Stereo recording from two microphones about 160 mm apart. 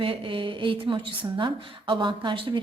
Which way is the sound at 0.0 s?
35° right (ahead or behind).